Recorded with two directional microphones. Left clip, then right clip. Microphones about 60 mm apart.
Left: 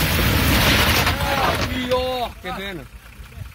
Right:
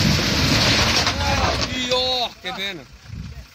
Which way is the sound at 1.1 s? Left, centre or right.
Centre.